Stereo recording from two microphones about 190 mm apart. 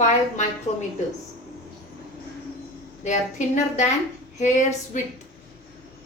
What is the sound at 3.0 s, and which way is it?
Speech, 40° left (ahead or behind).